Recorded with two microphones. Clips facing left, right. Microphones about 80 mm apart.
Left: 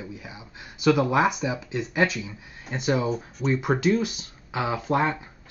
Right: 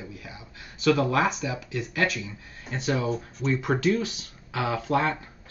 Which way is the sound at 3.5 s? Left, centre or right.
Centre.